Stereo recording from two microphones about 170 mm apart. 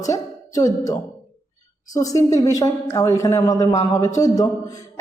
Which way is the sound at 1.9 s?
20° left (ahead or behind).